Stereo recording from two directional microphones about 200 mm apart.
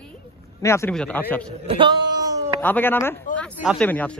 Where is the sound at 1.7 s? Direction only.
25° right (ahead or behind).